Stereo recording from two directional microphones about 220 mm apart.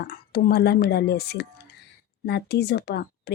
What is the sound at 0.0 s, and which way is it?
Speech, 45° left (ahead or behind).